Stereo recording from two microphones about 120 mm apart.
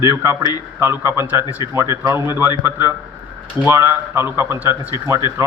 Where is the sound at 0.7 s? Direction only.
20° right (ahead or behind).